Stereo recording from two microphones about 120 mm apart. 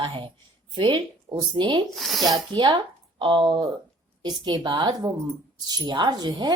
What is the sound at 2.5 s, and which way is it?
Speech, 40° right (ahead or behind).